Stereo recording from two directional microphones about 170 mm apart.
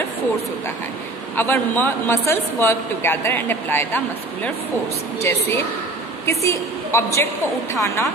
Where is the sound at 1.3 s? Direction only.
10° left (ahead or behind).